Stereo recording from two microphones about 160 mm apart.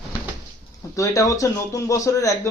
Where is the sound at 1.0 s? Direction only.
20° left (ahead or behind).